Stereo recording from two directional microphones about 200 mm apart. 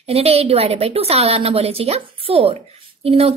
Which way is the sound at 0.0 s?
30° right (ahead or behind).